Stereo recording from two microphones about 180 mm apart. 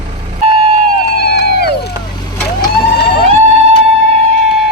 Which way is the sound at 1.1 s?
60° left (ahead or behind).